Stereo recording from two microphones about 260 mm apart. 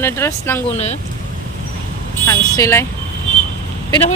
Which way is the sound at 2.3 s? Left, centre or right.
Centre.